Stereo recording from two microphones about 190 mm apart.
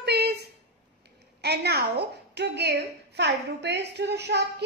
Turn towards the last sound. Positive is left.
turn(degrees=-65)  # may be behind; listen again after turning